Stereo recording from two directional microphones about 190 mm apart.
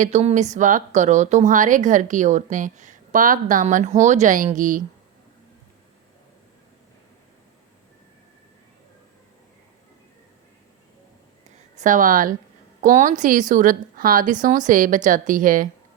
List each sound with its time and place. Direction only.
0.0 s a woman's voice: 35° right (ahead or behind)
11.5 s a woman's voice: 40° right (ahead or behind)